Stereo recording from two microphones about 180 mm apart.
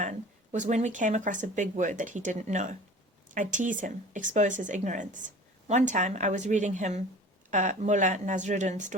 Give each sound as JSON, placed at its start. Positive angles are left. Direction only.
{"t": 0.0, "sound": "speech", "side_deg": -40}